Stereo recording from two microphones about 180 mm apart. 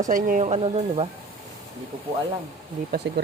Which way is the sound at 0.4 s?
35° right (ahead or behind).